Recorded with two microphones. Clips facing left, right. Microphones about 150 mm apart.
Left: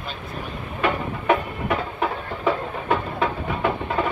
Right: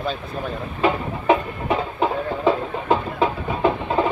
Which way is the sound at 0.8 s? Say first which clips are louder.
Right 3 dB; 25° right (ahead or behind).